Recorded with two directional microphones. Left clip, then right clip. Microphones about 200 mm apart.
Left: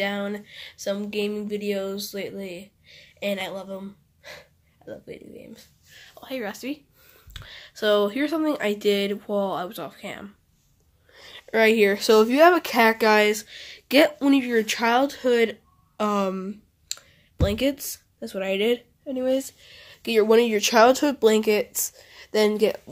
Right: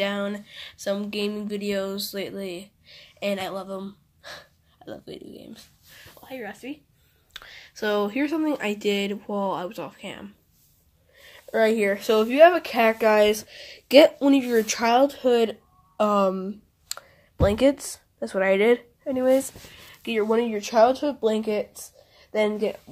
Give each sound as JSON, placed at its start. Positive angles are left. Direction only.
{"t": 0.0, "sound": "speech", "side_deg": 5}
{"t": 6.2, "sound": "speech", "side_deg": 35}
{"t": 7.4, "sound": "speech", "side_deg": 0}
{"t": 11.1, "sound": "a sound", "side_deg": 45}
{"t": 11.8, "sound": "speech", "side_deg": 40}
{"t": 13.3, "sound": "a woman's voice", "side_deg": 0}
{"t": 20.0, "sound": "speech", "side_deg": 45}